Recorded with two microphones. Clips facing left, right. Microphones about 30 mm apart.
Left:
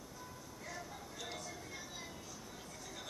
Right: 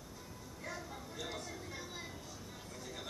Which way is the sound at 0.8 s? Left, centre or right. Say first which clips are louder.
Right 2 dB; centre.